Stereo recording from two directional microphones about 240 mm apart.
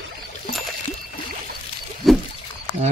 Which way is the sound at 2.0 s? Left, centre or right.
Centre.